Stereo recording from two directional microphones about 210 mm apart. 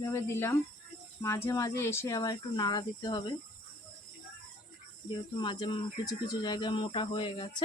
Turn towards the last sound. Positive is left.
turn(degrees=25)  # may be behind; listen again after turning